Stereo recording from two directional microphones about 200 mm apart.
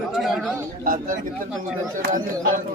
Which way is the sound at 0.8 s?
45° right (ahead or behind).